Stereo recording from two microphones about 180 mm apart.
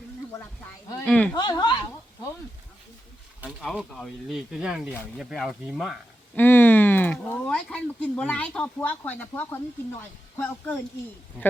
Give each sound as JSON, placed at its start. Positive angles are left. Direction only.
{"t": 1.0, "sound": "speech", "side_deg": 5}
{"t": 1.4, "sound": "a woman's voice", "side_deg": 25}
{"t": 3.6, "sound": "speech", "side_deg": 0}
{"t": 6.3, "sound": "speech", "side_deg": 10}